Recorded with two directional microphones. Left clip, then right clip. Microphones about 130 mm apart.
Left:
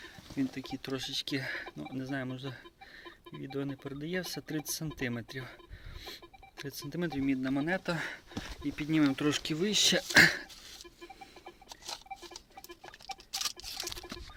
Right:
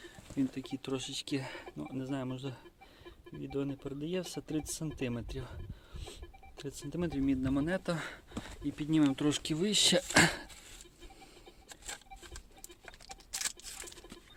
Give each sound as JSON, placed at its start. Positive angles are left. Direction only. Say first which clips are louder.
{"t": 0.0, "sound": "speech", "louder": "even", "side_deg": -25}
{"t": 6.6, "sound": "speech", "louder": "left 1 dB", "side_deg": -15}
{"t": 9.6, "sound": "speech", "louder": "left 1 dB", "side_deg": -45}